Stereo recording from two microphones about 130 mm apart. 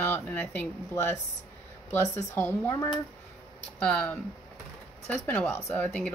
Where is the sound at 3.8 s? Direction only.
10° left (ahead or behind).